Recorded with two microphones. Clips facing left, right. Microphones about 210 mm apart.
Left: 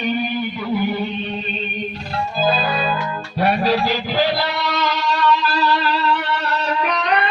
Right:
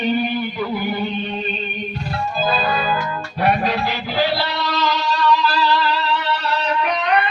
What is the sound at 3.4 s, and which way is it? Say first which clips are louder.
Music: left 2 dB; 35° left (ahead or behind).